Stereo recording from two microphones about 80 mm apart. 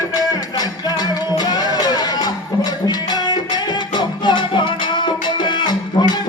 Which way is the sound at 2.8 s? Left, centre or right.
Left.